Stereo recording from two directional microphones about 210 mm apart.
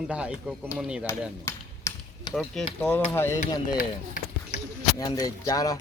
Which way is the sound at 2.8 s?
10° left (ahead or behind).